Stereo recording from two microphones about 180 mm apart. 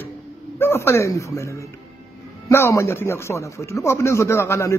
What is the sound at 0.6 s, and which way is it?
A man's voice, 15° left (ahead or behind).